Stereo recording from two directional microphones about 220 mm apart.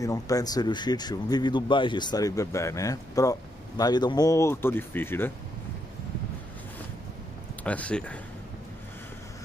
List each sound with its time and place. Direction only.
0.0 s speech: 15° left (ahead or behind)
7.6 s speech: 5° left (ahead or behind)